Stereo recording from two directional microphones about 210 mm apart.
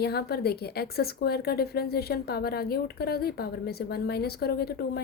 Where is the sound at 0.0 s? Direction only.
50° left (ahead or behind).